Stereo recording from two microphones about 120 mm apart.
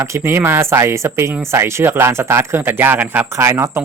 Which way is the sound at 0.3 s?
20° right (ahead or behind).